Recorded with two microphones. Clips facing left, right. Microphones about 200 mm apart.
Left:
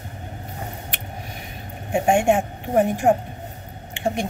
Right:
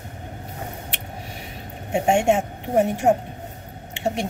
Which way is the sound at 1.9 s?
25° right (ahead or behind).